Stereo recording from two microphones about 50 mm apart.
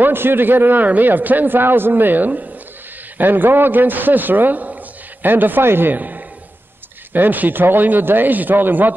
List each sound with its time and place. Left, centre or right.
0.0 s a man's voice: right
5.9 s a man's voice: right